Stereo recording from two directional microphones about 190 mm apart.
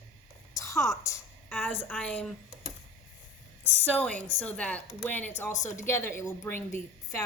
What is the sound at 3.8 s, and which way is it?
A woman's voice, 5° left (ahead or behind).